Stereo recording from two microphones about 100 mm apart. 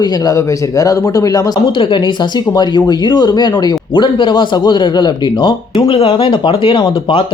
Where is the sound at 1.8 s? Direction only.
55° left (ahead or behind).